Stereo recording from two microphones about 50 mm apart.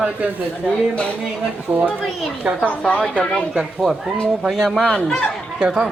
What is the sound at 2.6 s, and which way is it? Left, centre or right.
Speech, left.